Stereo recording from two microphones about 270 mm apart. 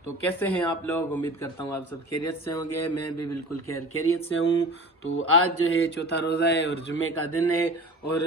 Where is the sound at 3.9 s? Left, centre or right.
Left.